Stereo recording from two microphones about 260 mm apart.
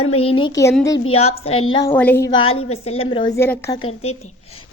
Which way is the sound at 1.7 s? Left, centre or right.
Centre.